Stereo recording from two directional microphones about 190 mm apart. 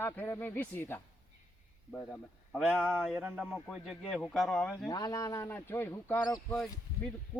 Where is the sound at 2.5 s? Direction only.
5° right (ahead or behind).